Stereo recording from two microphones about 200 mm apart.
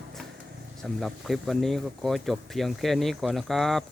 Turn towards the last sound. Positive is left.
turn(degrees=0)  # may be behind; listen again after turning